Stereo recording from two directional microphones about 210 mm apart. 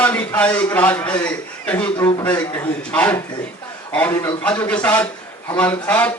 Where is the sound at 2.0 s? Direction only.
20° left (ahead or behind).